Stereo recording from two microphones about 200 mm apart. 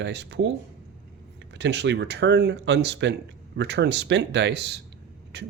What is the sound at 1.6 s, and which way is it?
Speech, 60° right (ahead or behind).